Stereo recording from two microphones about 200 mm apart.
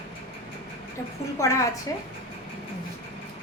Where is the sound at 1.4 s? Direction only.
15° left (ahead or behind).